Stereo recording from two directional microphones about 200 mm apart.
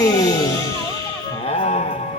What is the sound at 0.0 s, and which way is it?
Music, 15° left (ahead or behind).